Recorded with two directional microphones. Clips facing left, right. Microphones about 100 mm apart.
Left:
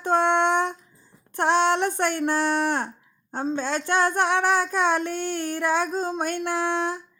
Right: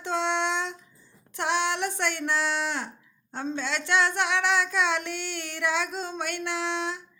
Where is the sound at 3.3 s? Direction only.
40° left (ahead or behind).